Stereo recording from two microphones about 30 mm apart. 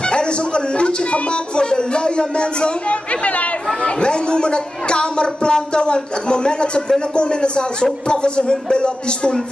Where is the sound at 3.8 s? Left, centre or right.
Left.